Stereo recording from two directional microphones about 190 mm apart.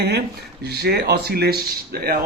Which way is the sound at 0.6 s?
60° right (ahead or behind).